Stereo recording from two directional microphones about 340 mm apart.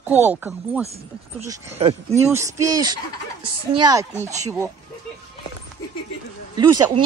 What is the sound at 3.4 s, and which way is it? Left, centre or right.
Speech, right.